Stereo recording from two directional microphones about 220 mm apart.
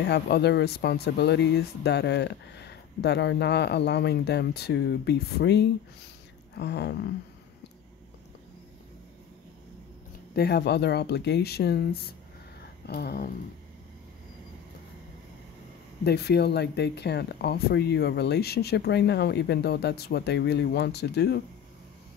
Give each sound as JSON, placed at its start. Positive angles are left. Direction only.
{"t": 0.0, "sound": "speech", "side_deg": 50}
{"t": 10.3, "sound": "speech", "side_deg": 50}
{"t": 16.0, "sound": "speech", "side_deg": 50}